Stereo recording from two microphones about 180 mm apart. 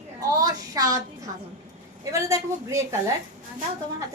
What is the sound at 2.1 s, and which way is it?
Speech, 15° right (ahead or behind).